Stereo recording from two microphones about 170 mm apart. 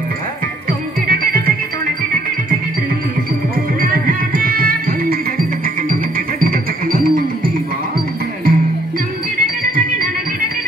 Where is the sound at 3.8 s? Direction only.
55° right (ahead or behind).